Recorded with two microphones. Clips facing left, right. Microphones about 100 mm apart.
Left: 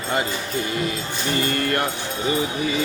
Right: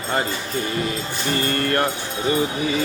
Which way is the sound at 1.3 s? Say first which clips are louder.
Right 1 dB; 40° right (ahead or behind).